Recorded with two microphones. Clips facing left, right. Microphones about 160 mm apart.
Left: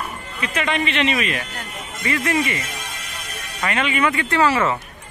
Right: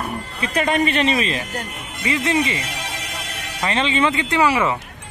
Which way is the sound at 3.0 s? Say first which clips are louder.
Right 3 dB; 70° right (ahead or behind).